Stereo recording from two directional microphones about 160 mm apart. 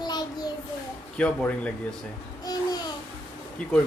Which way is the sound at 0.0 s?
25° left (ahead or behind).